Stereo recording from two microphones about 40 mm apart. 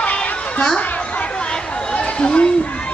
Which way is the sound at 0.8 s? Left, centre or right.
Left.